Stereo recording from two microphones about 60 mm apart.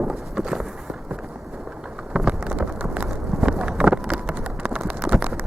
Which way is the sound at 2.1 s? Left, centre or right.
Centre.